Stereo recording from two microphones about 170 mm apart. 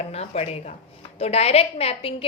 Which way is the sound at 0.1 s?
40° left (ahead or behind).